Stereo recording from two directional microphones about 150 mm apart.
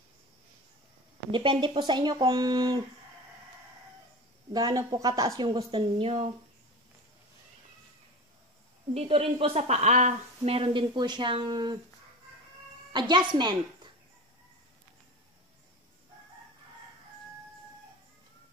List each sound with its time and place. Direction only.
1.3 s a woman's voice: 30° right (ahead or behind)
4.5 s a woman's voice: 25° right (ahead or behind)
8.9 s speech: 40° right (ahead or behind)
13.1 s speech: 30° right (ahead or behind)